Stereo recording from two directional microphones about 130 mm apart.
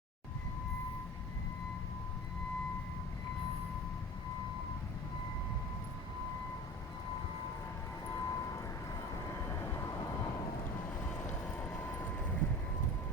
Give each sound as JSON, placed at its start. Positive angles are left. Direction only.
{"t": 8.0, "sound": "vehicle", "side_deg": 25}
{"t": 10.8, "sound": "vehicle", "side_deg": 15}